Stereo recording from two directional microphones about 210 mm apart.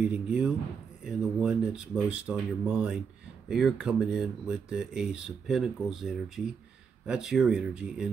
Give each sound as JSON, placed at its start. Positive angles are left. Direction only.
{"t": 0.0, "sound": "speech", "side_deg": -5}